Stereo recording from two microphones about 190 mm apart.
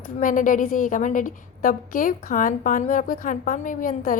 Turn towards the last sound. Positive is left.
turn(degrees=45)  # may be behind; listen again after turning